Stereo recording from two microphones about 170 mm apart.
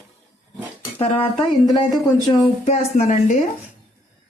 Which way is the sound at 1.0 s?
35° left (ahead or behind).